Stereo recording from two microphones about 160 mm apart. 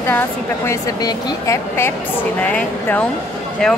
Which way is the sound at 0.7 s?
20° left (ahead or behind).